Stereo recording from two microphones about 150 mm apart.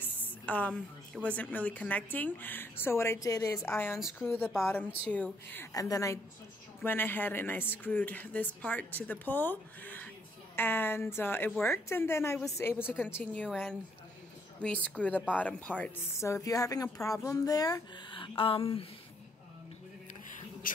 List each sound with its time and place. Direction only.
0.0 s a woman's voice: 10° left (ahead or behind)
16.2 s speech: 20° left (ahead or behind); by 18.9 s 40° left (ahead or behind)
20.6 s speech: 70° left (ahead or behind)